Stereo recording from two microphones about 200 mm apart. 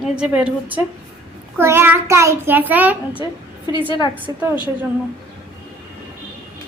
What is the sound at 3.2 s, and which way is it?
Speech, 20° left (ahead or behind).